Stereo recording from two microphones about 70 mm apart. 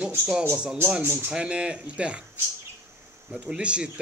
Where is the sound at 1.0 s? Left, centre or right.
Right.